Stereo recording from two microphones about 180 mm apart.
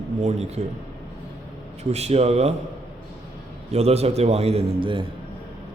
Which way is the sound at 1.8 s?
35° right (ahead or behind).